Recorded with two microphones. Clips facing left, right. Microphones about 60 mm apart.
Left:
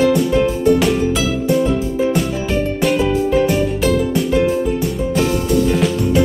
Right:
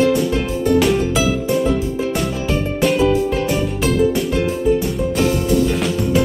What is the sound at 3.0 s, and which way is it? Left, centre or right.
Music, centre.